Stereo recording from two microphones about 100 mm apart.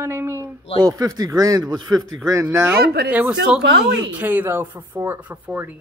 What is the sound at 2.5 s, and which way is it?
Speech, 20° right (ahead or behind).